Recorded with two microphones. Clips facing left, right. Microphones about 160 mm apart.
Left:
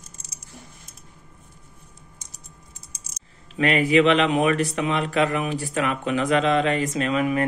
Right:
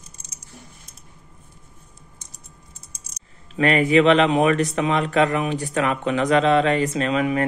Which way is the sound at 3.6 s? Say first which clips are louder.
Right 2 dB; 40° right (ahead or behind).